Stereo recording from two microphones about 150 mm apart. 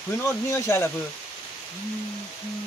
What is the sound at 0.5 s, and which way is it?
Speech, 15° left (ahead or behind).